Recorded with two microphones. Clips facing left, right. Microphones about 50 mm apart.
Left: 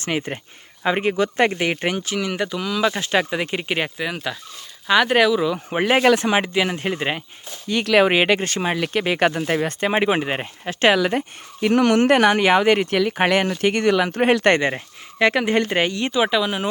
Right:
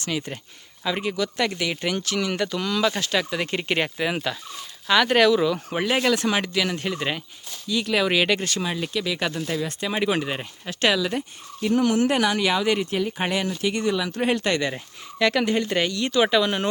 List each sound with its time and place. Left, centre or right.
0.0 s speech: left
2.1 s speech: centre
2.9 s speech: left
5.8 s speech: left
6.2 s speech: left
7.9 s speech: left
10.9 s speech: left
11.6 s speech: left
15.2 s speech: left
16.2 s speech: centre